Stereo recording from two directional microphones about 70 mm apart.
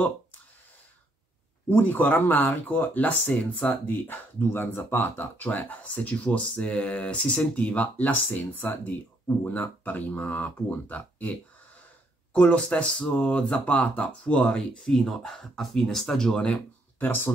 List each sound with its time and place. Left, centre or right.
1.7 s speech: left; by 16.5 s centre
17.0 s speech: left